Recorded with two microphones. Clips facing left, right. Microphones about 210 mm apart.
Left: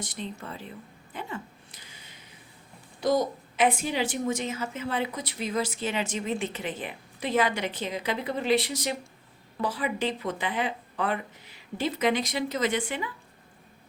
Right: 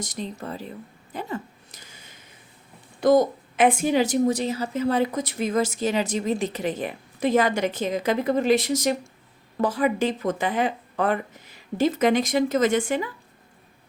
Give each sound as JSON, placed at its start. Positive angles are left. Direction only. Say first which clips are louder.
{"t": 0.0, "sound": "speech", "louder": "right 4 dB", "side_deg": -40}
{"t": 1.1, "sound": "a sound", "louder": "right 5 dB", "side_deg": -40}
{"t": 3.0, "sound": "a woman's voice", "louder": "right 7 dB", "side_deg": -50}